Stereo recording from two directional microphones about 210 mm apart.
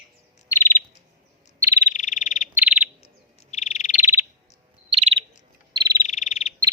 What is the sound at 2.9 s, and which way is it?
Bird vocalization, 30° left (ahead or behind).